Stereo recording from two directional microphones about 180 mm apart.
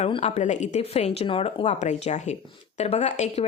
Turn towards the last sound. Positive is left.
turn(degrees=35)  # may be behind; listen again after turning